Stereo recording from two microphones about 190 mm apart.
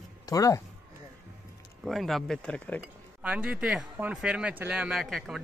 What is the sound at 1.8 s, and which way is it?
Speech, centre (ahead or behind).